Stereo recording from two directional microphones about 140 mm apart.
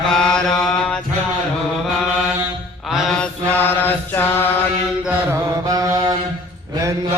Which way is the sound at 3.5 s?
15° left (ahead or behind).